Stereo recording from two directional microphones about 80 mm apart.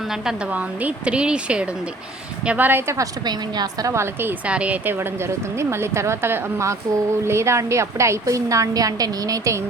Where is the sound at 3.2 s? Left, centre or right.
Right.